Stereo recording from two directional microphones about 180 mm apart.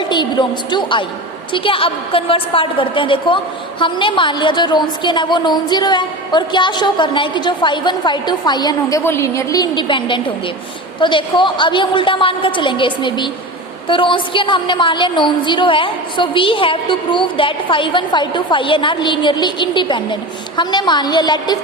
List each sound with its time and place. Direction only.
0.0 s a woman's voice: 25° left (ahead or behind)